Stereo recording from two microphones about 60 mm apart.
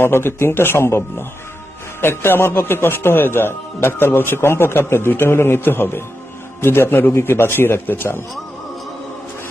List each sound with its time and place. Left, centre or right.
0.0 s speech: left